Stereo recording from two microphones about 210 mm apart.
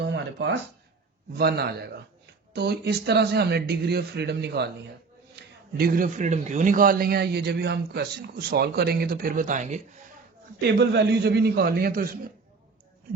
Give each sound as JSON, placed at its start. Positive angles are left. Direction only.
{"t": 0.0, "sound": "a sound", "side_deg": -55}
{"t": 1.3, "sound": "a man's voice", "side_deg": -50}
{"t": 10.6, "sound": "a man's voice", "side_deg": -50}